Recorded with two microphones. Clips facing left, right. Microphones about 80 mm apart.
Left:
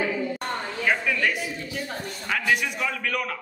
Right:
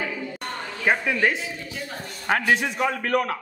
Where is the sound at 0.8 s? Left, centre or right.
Right.